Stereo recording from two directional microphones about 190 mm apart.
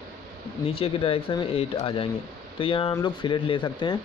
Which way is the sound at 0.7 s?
30° left (ahead or behind).